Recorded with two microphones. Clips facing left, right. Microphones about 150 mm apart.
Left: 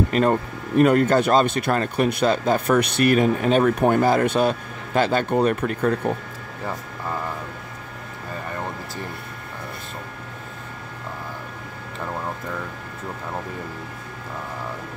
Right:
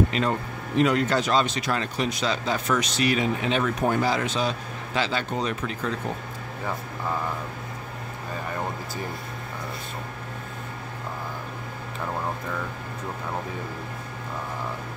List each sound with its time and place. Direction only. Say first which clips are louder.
0.1 s speech: left 6 dB; 50° left (ahead or behind)